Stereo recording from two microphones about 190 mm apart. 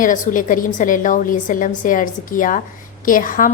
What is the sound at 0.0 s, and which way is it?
A woman's voice, 45° left (ahead or behind).